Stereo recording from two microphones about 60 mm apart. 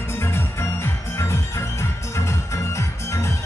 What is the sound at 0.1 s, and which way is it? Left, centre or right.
Music, left.